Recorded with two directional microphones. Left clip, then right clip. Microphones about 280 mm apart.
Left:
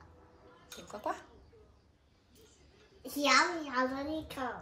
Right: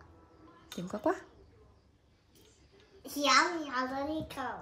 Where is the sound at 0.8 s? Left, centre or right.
Right.